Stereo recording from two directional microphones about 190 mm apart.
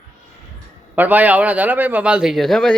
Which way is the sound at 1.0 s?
10° right (ahead or behind).